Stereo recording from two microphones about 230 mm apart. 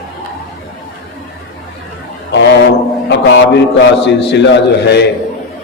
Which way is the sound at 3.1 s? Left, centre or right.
Left.